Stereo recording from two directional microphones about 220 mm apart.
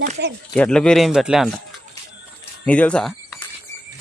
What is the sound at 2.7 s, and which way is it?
Speech, 5° left (ahead or behind).